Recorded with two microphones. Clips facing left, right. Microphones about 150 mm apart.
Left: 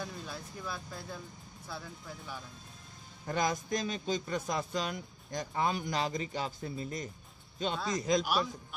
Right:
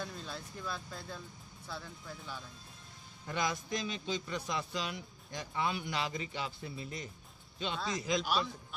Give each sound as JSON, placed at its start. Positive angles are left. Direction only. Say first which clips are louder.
{"t": 0.0, "sound": "speech", "louder": "left 1 dB", "side_deg": 10}
{"t": 3.3, "sound": "a man's voice", "louder": "left 4 dB", "side_deg": 45}